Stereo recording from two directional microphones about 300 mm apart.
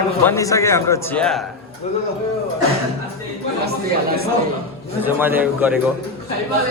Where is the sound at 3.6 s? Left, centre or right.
Right.